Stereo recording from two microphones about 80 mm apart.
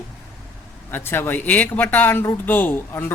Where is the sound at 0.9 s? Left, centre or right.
Left.